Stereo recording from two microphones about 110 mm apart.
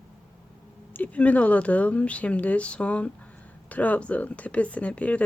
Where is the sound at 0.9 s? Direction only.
15° left (ahead or behind).